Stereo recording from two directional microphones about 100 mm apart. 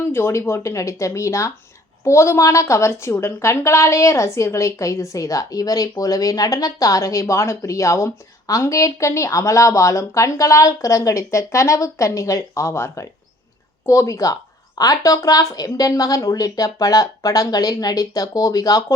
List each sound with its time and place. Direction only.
0.1 s a woman's voice: 25° left (ahead or behind)